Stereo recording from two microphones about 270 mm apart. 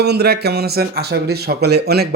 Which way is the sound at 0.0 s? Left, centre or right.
Right.